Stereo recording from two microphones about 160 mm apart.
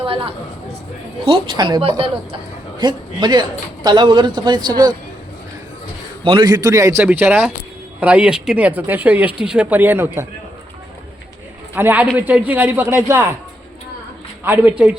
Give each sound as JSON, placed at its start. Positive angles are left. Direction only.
{"t": 0.0, "sound": "a woman's voice", "side_deg": -35}
{"t": 6.2, "sound": "a man's voice", "side_deg": -30}
{"t": 11.7, "sound": "speech", "side_deg": -10}
{"t": 14.4, "sound": "speech", "side_deg": -10}